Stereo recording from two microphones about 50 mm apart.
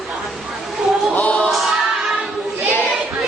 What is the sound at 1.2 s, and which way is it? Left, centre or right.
Music, left.